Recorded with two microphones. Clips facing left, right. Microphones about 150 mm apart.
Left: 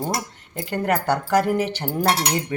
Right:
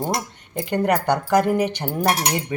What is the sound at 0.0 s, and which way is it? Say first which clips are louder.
Speech: right 2 dB; 15° right (ahead or behind).